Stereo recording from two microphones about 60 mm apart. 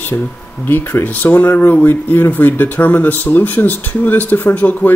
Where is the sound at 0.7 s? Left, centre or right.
Left.